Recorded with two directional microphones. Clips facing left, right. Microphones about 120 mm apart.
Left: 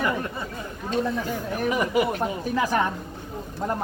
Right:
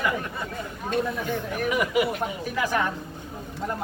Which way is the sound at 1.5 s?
35° left (ahead or behind).